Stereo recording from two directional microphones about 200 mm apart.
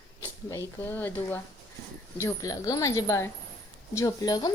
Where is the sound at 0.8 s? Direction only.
10° left (ahead or behind).